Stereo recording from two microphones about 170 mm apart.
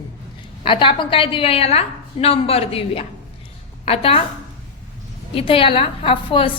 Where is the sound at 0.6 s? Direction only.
30° left (ahead or behind).